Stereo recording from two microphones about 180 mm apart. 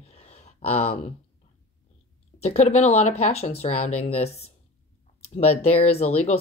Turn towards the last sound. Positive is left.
turn(degrees=35)  # may be behind; listen again after turning